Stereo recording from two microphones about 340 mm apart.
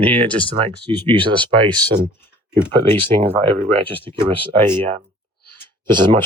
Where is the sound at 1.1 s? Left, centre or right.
Centre.